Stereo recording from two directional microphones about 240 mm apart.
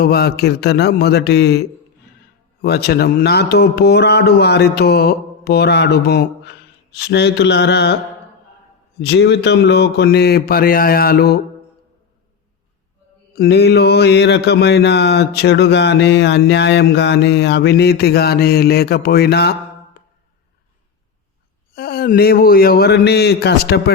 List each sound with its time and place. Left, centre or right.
0.0 s mantra: left
9.0 s speech: left
13.3 s mantra: left
21.8 s speech: left